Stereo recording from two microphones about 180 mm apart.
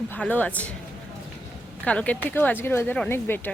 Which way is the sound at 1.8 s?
5° left (ahead or behind).